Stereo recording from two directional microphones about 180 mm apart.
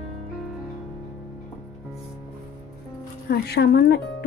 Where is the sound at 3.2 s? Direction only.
65° left (ahead or behind).